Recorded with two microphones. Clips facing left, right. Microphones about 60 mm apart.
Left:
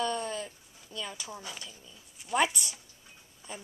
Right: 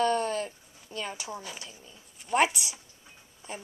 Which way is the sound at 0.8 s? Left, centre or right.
Right.